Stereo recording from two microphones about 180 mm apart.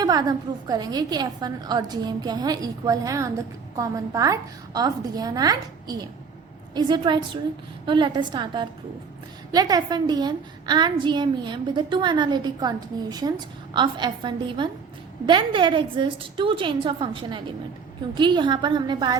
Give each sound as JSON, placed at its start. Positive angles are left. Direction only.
{"t": 0.0, "sound": "a woman's voice", "side_deg": -20}